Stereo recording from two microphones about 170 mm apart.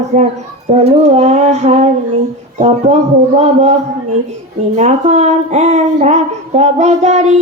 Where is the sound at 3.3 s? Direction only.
40° right (ahead or behind).